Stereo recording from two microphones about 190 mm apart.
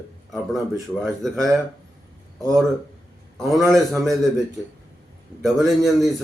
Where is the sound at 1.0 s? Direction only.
Centre (ahead or behind).